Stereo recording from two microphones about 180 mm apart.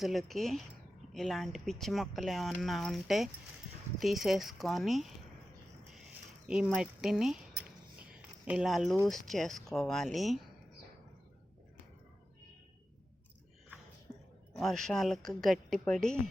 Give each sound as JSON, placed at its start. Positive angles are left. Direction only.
{"t": 0.0, "sound": "speech", "side_deg": 0}
{"t": 6.5, "sound": "speech", "side_deg": -5}
{"t": 8.1, "sound": "a sound", "side_deg": -5}
{"t": 9.0, "sound": "speech", "side_deg": 0}
{"t": 14.5, "sound": "speech", "side_deg": 0}